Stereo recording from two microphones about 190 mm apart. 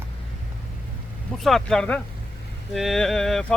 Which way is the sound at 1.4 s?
Centre (ahead or behind).